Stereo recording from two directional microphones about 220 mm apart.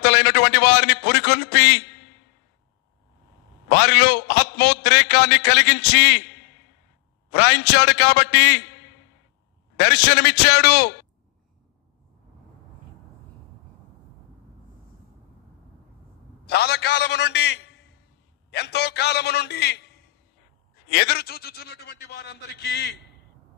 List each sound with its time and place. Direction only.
0.0 s a sound: 50° left (ahead or behind)
3.7 s a man's voice: 50° left (ahead or behind)
9.7 s a man's voice: 50° left (ahead or behind)
16.5 s a man's voice: 50° left (ahead or behind)
18.5 s a man's voice: 50° left (ahead or behind)
20.9 s a man's voice: 50° left (ahead or behind)